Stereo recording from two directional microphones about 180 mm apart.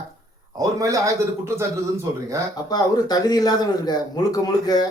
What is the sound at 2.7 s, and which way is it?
Speech, 20° left (ahead or behind).